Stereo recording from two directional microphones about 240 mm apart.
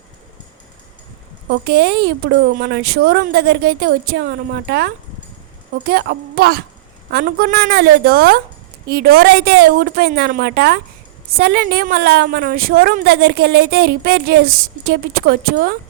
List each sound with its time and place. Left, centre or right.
1.5 s a woman's voice: right